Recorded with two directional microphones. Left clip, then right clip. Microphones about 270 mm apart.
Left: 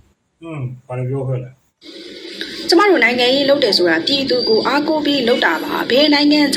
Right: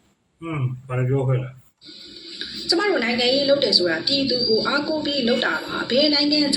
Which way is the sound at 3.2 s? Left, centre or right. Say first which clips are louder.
Left 5 dB; left.